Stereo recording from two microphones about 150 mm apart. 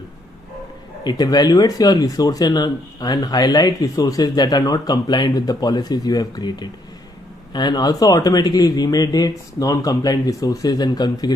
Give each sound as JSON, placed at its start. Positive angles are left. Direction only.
{"t": 1.0, "sound": "speech", "side_deg": 25}